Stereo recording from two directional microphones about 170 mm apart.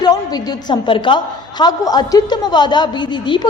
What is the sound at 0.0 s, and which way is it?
A woman's voice, 25° left (ahead or behind).